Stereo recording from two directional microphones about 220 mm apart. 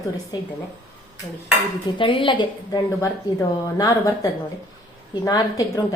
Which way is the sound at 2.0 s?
20° left (ahead or behind).